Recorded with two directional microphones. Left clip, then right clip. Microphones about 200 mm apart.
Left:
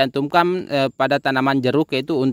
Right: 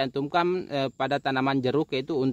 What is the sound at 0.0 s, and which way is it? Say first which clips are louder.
Speech: left 8 dB; 45° left (ahead or behind).